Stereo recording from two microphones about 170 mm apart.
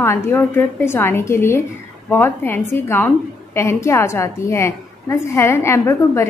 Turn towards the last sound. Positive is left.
turn(degrees=15)  # may be behind; listen again after turning